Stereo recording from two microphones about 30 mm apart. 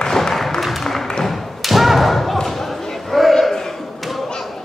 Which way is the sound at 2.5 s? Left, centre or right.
Centre.